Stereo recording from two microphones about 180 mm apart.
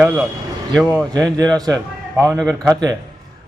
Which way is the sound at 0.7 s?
Centre (ahead or behind).